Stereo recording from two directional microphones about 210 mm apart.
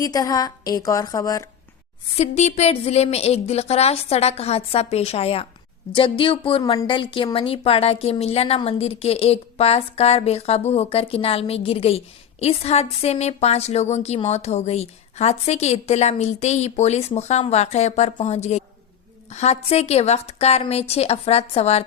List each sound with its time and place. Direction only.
0.0 s a woman's voice: 15° left (ahead or behind)
2.0 s a woman's voice: 30° left (ahead or behind)